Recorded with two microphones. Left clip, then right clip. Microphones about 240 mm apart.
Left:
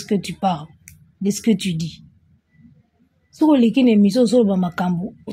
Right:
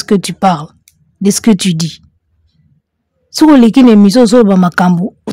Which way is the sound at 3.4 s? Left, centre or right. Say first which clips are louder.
Right 10 dB; right.